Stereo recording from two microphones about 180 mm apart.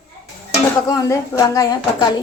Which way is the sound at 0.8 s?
20° left (ahead or behind).